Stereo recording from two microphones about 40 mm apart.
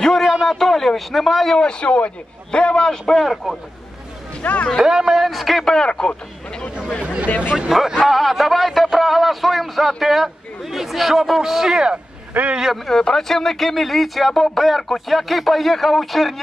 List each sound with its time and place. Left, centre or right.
0.0 s a sound: centre
0.5 s a man's voice: centre
1.7 s a man's voice: left
4.4 s speech: left
4.7 s speech: centre
5.7 s a man's voice: centre
7.0 s speech: right
7.2 s speech: left
7.5 s speech: centre
8.1 s speech: centre
12.4 s speech: right
12.8 s speech: centre